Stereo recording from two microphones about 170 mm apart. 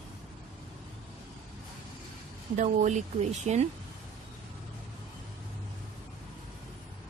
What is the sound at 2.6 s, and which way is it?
A woman's voice, 45° right (ahead or behind).